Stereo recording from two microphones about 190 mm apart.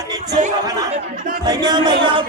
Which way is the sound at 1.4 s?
20° right (ahead or behind).